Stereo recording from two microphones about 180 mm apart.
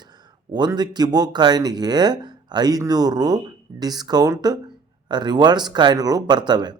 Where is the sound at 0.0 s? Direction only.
25° right (ahead or behind).